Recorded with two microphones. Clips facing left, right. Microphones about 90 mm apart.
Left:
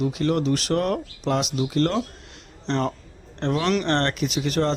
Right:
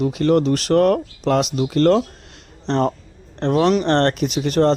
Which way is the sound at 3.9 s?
40° right (ahead or behind).